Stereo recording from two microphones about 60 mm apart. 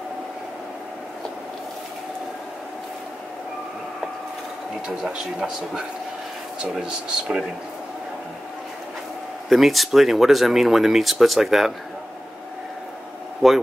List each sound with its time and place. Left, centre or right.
4.8 s speech: centre
9.5 s speech: centre
13.4 s speech: centre